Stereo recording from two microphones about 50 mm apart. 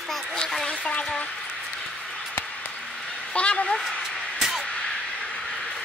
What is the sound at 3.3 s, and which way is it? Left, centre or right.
Speech, left.